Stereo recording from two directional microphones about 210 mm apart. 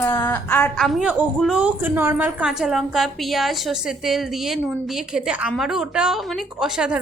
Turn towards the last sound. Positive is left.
turn(degrees=-5)  # may be behind; listen again after turning